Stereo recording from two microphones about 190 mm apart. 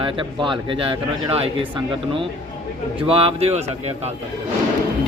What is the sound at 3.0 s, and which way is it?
Speech, 30° right (ahead or behind).